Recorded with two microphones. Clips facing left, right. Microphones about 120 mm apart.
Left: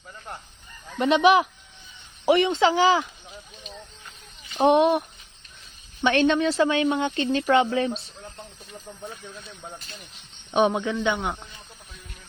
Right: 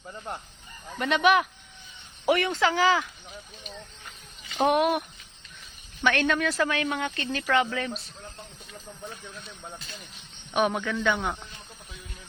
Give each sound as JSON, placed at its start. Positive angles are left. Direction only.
{"t": 1.1, "sound": "speech", "side_deg": 5}
{"t": 2.2, "sound": "speech", "side_deg": 30}
{"t": 4.6, "sound": "speech", "side_deg": 30}
{"t": 10.5, "sound": "speech", "side_deg": 25}